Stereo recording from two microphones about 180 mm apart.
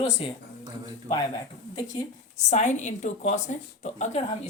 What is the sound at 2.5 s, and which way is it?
A woman's voice, 40° left (ahead or behind).